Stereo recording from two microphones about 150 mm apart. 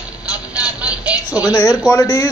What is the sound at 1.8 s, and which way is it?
Speech, 20° left (ahead or behind).